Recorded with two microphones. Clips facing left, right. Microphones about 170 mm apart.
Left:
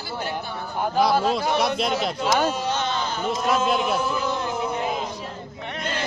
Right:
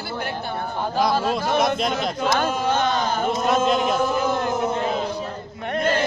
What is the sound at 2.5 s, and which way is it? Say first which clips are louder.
Speech: right 4 dB; 50° right (ahead or behind).